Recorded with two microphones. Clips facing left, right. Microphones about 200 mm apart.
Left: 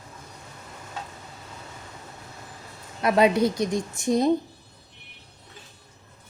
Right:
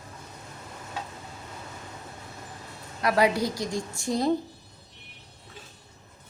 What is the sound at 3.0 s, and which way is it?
A woman's voice, 25° left (ahead or behind).